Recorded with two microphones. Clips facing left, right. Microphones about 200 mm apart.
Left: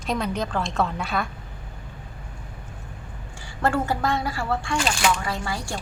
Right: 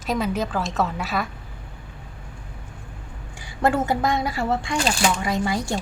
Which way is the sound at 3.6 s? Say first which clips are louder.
Right 2 dB; 20° right (ahead or behind).